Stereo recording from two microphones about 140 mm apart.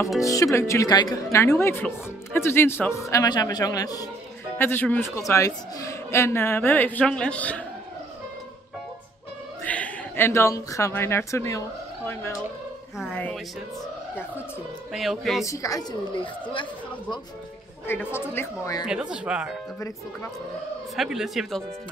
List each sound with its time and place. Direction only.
0.2 s a man's voice: 25° left (ahead or behind)
4.6 s a woman's voice: 15° left (ahead or behind)
9.7 s speech: 15° left (ahead or behind)
13.1 s a woman's voice: 10° left (ahead or behind)
14.9 s speech: centre (ahead or behind)
15.4 s a man's voice: 25° left (ahead or behind)
17.8 s a woman's voice: 15° left (ahead or behind)
18.9 s speech: 5° right (ahead or behind)
20.9 s speech: centre (ahead or behind)